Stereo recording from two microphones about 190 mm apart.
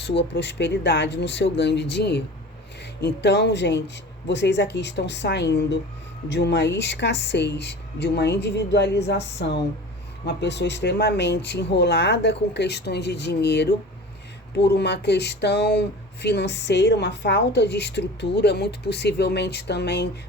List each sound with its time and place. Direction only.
0.0 s speech: 65° left (ahead or behind)